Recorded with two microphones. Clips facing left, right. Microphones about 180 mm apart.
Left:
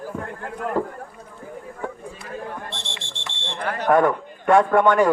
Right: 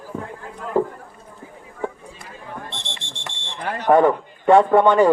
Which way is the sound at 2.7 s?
20° right (ahead or behind).